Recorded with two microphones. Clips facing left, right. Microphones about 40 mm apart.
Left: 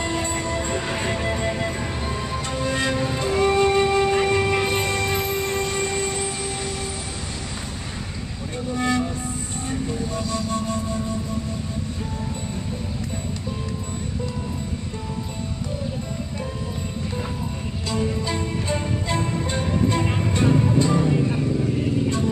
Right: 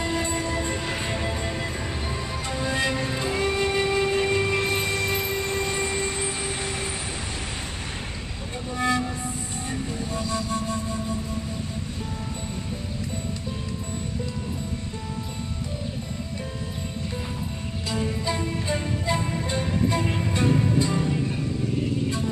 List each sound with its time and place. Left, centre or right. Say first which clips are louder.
0.2 s music: left 1 dB; centre
2.6 s music: left 2 dB; centre
6.2 s music: left 1 dB; right
8.6 s music: left 2 dB; centre
17.9 s music: left 2 dB; centre
21.0 s vehicle: left 5 dB; centre